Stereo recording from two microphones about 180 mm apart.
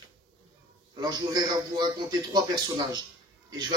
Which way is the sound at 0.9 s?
20° right (ahead or behind).